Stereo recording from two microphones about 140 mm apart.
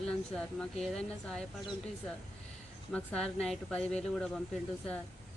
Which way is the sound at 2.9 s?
5° left (ahead or behind).